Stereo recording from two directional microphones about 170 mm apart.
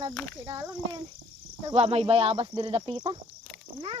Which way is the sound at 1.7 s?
35° right (ahead or behind).